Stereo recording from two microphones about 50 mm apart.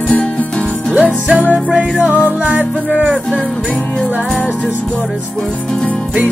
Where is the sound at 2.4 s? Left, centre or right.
Right.